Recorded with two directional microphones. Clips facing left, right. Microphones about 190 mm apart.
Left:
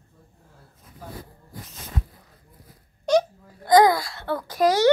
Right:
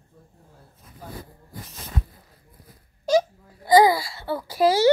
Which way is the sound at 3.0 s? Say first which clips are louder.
Even; 5° right (ahead or behind).